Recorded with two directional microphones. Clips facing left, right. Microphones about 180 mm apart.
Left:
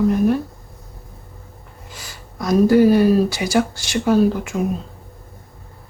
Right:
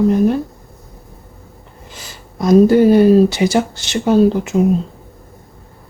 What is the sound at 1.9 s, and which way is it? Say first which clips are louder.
Speech: right 2 dB; 25° right (ahead or behind).